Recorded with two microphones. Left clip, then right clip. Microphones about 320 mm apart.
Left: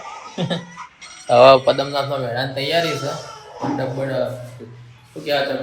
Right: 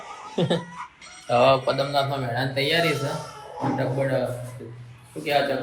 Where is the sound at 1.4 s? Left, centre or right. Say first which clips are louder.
Left 9 dB; left.